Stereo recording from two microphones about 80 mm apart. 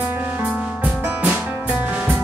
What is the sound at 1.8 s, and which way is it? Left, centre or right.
Music, centre.